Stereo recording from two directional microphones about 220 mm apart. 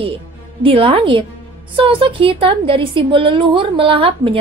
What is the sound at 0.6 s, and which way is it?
A woman's voice, 25° right (ahead or behind).